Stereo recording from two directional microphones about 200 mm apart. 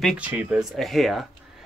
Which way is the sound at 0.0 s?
5° right (ahead or behind).